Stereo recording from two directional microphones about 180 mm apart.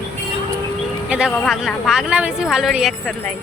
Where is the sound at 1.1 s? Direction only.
5° right (ahead or behind).